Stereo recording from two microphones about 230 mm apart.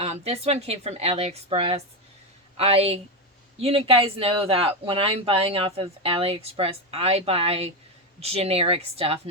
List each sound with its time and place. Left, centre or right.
0.0 s speech: right